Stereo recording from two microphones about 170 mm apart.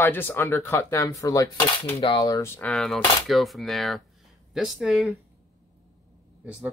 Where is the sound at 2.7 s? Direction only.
Centre (ahead or behind).